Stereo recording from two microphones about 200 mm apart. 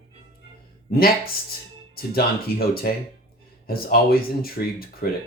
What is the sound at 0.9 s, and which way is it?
Speech, 50° left (ahead or behind).